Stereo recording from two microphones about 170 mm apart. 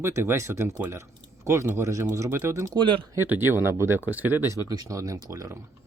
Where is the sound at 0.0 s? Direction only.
15° right (ahead or behind).